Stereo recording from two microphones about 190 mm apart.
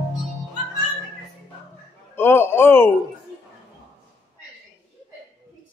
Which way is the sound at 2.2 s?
10° left (ahead or behind).